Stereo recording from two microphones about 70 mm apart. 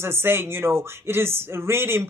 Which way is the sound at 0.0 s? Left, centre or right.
Right.